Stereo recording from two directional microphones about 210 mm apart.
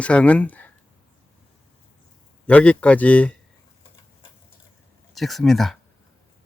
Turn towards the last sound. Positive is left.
turn(degrees=0)  # may be behind; listen again after turning